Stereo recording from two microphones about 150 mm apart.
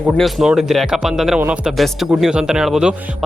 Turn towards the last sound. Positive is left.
turn(degrees=-5)  # may be behind; listen again after turning